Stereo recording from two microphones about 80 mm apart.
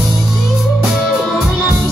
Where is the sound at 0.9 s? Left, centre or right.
Centre.